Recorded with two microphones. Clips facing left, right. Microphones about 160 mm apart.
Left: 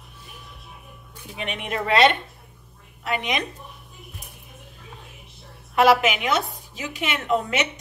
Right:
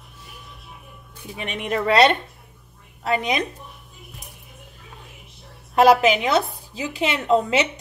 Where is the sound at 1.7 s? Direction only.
40° right (ahead or behind).